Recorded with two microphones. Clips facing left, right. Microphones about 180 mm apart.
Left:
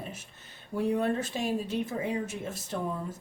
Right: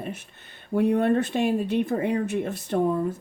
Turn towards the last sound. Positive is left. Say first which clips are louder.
# right 10 dB
turn(degrees=-60)  # may be behind; listen again after turning